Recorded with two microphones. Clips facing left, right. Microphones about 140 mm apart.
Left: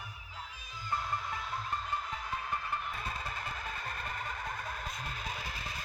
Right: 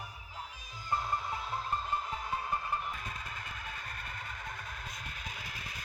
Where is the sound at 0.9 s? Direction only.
25° right (ahead or behind).